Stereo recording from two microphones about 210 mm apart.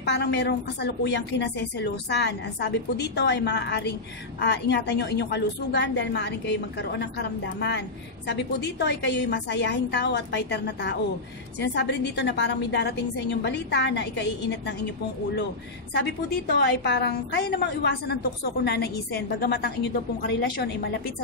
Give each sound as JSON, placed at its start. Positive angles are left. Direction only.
{"t": 0.0, "sound": "a woman's voice", "side_deg": 55}
{"t": 15.9, "sound": "a woman's voice", "side_deg": 50}